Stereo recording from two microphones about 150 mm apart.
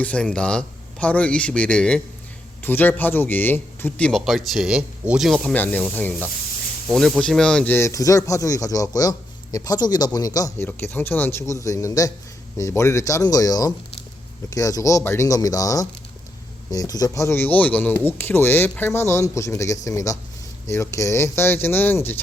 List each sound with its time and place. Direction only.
0.0 s speech: 10° left (ahead or behind)
6.8 s speech: centre (ahead or behind); by 10.7 s 25° left (ahead or behind)
10.7 s speech: 15° left (ahead or behind)